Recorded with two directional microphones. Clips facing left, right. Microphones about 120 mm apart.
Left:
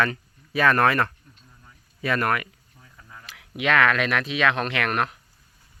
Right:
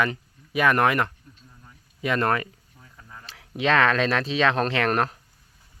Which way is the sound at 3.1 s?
30° right (ahead or behind).